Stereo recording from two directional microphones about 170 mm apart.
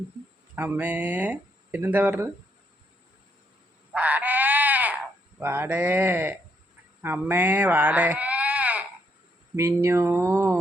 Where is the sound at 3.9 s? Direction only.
10° right (ahead or behind).